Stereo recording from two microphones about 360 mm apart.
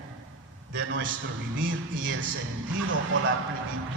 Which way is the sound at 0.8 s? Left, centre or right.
Right.